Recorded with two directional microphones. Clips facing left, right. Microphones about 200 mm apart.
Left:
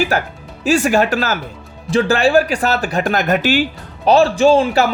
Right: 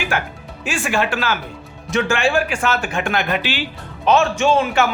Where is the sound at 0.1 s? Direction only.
40° left (ahead or behind).